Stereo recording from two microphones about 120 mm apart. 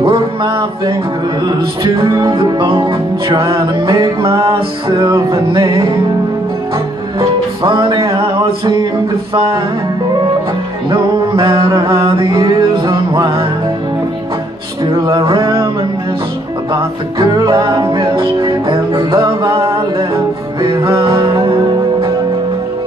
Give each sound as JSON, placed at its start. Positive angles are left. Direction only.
{"t": 0.0, "sound": "a sound", "side_deg": -45}
{"t": 1.4, "sound": "music", "side_deg": -40}
{"t": 3.9, "sound": "music", "side_deg": -30}
{"t": 7.2, "sound": "music", "side_deg": -45}
{"t": 10.9, "sound": "mantra", "side_deg": -40}
{"t": 12.3, "sound": "music", "side_deg": -35}
{"t": 15.0, "sound": "music", "side_deg": -45}
{"t": 17.5, "sound": "music", "side_deg": -40}
{"t": 20.6, "sound": "music", "side_deg": -45}